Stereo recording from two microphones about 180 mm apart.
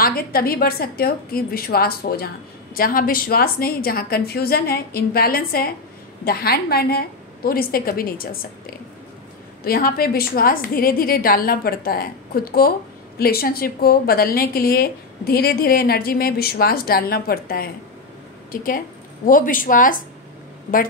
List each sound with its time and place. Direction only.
0.0 s a woman's voice: 55° left (ahead or behind)